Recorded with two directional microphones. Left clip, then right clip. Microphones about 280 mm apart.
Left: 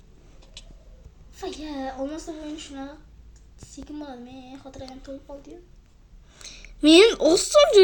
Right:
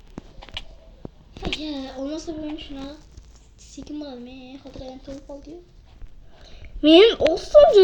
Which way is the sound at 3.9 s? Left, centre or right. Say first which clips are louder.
Right 3 dB; left.